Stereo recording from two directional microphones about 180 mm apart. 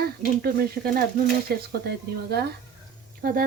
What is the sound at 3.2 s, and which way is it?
Speech, 50° right (ahead or behind).